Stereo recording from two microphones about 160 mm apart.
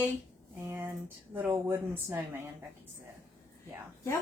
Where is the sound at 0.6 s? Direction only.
15° right (ahead or behind).